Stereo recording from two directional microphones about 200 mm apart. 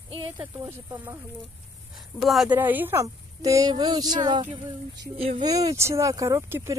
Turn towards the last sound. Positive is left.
turn(degrees=-15)  # may be behind; listen again after turning